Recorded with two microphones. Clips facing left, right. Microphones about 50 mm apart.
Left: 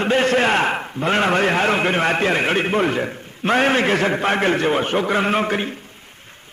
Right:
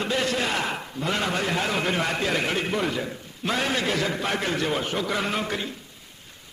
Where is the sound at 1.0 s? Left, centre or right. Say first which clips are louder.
Left 9 dB; left.